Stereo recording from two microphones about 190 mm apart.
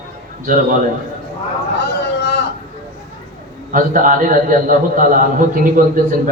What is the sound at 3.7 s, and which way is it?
A man's voice, 45° right (ahead or behind).